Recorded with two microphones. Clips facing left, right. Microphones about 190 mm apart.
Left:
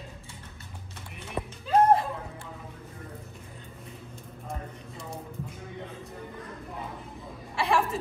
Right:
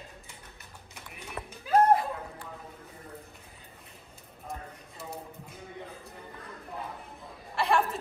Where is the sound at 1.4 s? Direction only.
20° left (ahead or behind).